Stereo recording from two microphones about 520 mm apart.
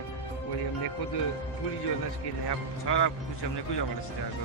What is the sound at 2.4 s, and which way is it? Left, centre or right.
Speech, left.